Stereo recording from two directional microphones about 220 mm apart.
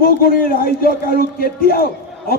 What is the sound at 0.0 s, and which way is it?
A man's voice, 40° left (ahead or behind).